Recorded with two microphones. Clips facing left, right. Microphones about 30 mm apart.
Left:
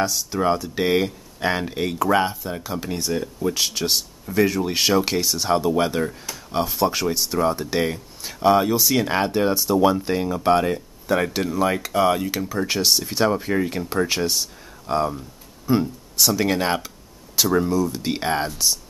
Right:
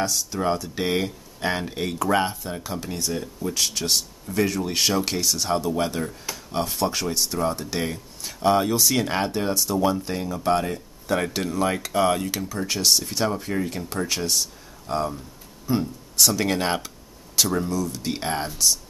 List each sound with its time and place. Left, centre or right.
0.0 s speech: centre
6.5 s speech: centre
11.1 s speech: centre
17.6 s speech: centre